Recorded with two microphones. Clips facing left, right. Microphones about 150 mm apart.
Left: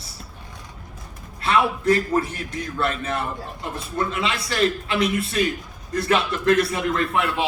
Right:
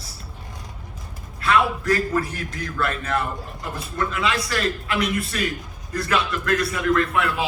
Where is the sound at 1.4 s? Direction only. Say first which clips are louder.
Left 1 dB; 25° left (ahead or behind).